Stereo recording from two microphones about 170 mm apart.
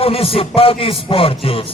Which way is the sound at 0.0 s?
35° left (ahead or behind).